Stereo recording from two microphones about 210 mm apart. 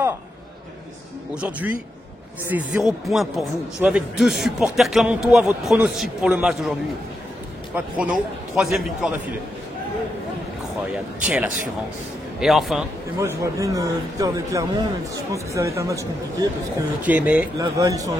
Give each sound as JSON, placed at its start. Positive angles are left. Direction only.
{"t": 1.3, "sound": "a man's voice", "side_deg": -5}
{"t": 7.7, "sound": "a man's voice", "side_deg": -5}
{"t": 11.2, "sound": "a man's voice", "side_deg": -5}
{"t": 13.2, "sound": "a man's voice", "side_deg": -15}